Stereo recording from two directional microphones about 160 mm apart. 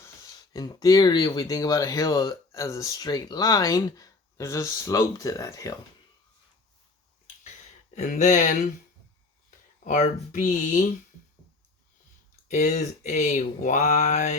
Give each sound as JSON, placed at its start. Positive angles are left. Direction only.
{"t": 0.5, "sound": "speech", "side_deg": 25}
{"t": 7.9, "sound": "speech", "side_deg": 55}
{"t": 9.8, "sound": "speech", "side_deg": 50}
{"t": 12.5, "sound": "speech", "side_deg": 50}